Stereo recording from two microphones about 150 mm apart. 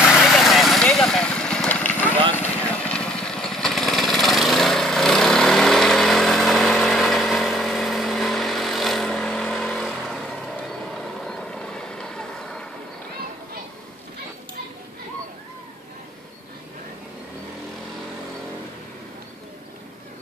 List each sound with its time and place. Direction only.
0.0 s vehicle: centre (ahead or behind)